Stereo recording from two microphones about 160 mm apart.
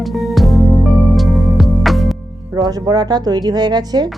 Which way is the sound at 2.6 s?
25° right (ahead or behind).